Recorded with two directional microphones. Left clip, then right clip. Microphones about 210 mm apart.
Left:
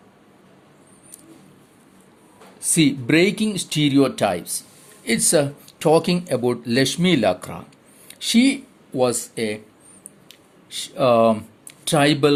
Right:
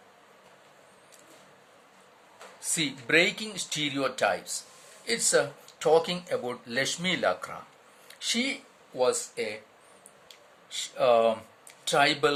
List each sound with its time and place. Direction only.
2.7 s speech: 35° left (ahead or behind)
10.2 s a sound: 35° left (ahead or behind)
11.9 s speech: 35° left (ahead or behind)